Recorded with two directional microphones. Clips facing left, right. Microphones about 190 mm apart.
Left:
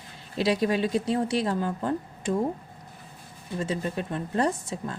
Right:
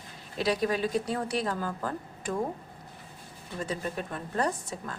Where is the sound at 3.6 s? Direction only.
25° left (ahead or behind).